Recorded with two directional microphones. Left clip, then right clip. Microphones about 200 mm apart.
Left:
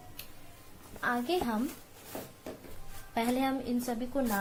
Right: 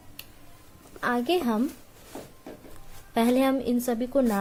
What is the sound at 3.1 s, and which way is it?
A woman's voice, 50° right (ahead or behind).